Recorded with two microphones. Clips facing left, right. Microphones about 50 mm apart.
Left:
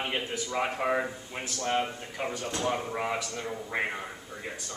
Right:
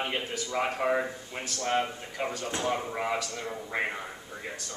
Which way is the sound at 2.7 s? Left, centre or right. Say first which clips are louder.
Right 1 dB; centre.